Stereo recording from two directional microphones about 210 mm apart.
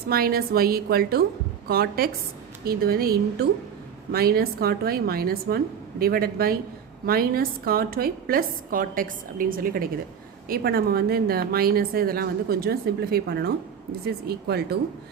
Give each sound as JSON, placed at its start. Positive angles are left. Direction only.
{"t": 0.1, "sound": "a woman's voice", "side_deg": -45}